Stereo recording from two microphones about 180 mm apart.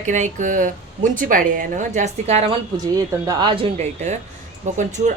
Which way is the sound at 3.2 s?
20° right (ahead or behind).